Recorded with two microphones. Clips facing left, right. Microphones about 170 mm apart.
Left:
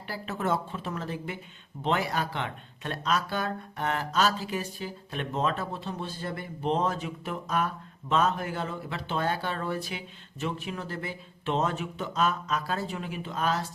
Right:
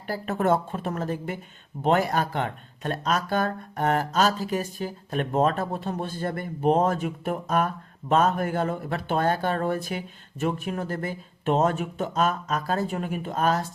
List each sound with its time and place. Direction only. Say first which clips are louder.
0.1 s speech: right 6 dB; 50° right (ahead or behind)